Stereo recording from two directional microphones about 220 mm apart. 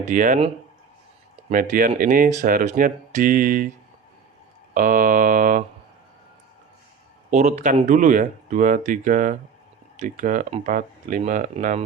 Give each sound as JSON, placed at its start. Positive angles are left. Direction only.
{"t": 0.0, "sound": "speech", "side_deg": -35}
{"t": 4.7, "sound": "speech", "side_deg": -35}
{"t": 7.3, "sound": "speech", "side_deg": -30}